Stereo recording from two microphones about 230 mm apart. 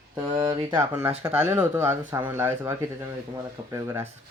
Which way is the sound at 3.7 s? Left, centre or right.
Centre.